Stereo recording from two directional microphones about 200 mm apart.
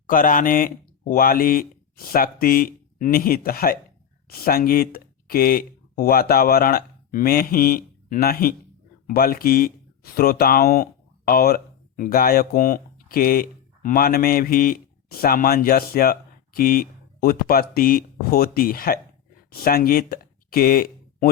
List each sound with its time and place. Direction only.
0.1 s speech: 40° left (ahead or behind)